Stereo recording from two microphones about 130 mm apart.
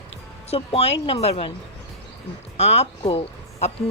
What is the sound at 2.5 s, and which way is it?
Speech, 55° left (ahead or behind).